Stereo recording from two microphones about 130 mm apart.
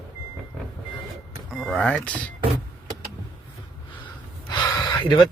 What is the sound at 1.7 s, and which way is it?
Speech, 10° left (ahead or behind).